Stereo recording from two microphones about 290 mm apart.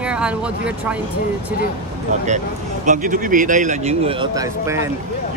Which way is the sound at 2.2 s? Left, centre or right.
Right.